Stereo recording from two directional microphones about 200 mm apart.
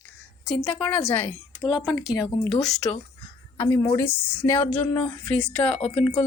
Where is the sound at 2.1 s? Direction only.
20° left (ahead or behind).